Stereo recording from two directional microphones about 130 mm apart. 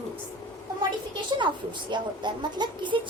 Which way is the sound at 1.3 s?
35° right (ahead or behind).